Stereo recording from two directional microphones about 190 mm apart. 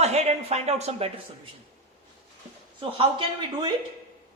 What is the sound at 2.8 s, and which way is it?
Speech, 25° right (ahead or behind).